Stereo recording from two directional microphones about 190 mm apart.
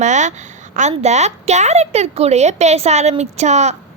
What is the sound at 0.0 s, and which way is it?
A woman's voice, 40° right (ahead or behind).